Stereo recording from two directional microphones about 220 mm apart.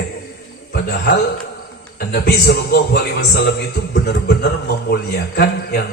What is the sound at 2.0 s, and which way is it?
A man's voice, 45° left (ahead or behind).